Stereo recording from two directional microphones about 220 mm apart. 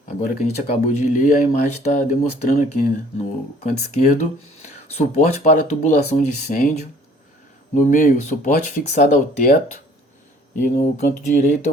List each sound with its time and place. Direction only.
0.4 s speech: 35° left (ahead or behind)
7.8 s speech: 40° left (ahead or behind)
10.6 s speech: 35° left (ahead or behind)